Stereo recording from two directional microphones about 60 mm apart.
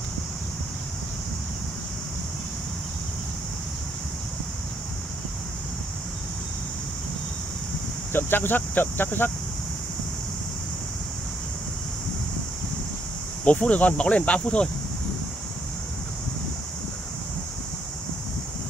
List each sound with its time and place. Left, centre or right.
8.1 s speech: left
13.4 s speech: left